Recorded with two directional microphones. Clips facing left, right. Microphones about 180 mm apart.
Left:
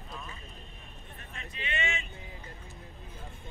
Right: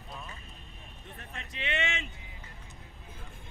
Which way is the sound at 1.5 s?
75° right (ahead or behind).